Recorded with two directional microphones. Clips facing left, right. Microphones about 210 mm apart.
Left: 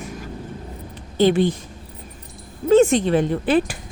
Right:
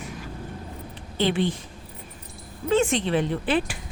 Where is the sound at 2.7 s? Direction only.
40° left (ahead or behind).